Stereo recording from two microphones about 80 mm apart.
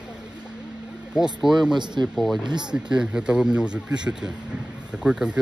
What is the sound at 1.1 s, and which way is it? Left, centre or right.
Speech, centre.